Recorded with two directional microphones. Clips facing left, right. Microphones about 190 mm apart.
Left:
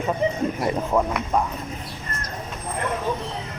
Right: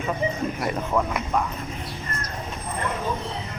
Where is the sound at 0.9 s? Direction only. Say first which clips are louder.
Left 2 dB; 25° left (ahead or behind).